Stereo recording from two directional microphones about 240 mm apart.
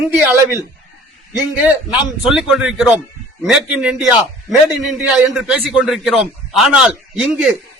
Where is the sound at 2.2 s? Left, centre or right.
Centre.